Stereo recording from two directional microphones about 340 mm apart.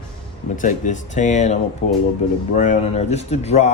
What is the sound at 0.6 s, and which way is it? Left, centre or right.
Speech, left.